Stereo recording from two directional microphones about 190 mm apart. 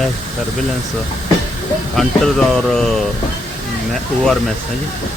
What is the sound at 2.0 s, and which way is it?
Speech, centre (ahead or behind).